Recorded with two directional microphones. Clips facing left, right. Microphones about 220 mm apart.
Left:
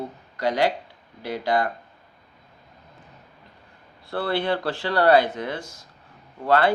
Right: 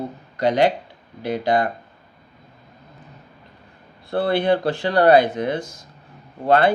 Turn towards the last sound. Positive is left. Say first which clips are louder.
# right 3 dB
turn(degrees=-20)  # may be behind; listen again after turning